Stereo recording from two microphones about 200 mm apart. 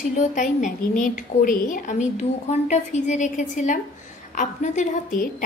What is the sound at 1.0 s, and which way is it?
Speech, 45° left (ahead or behind).